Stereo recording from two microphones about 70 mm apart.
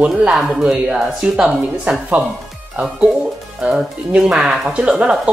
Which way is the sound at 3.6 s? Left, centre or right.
Centre.